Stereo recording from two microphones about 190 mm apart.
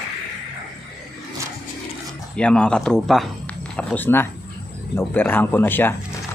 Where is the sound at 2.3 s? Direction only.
5° left (ahead or behind).